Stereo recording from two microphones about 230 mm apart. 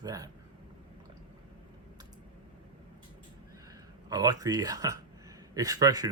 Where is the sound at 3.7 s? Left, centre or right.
Centre.